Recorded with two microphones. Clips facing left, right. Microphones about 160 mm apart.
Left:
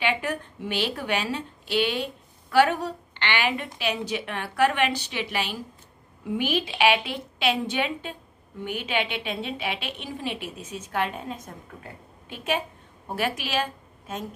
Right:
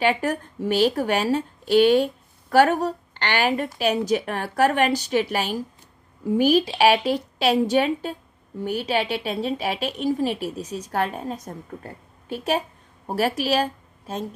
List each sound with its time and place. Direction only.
0.0 s a woman's voice: 40° right (ahead or behind)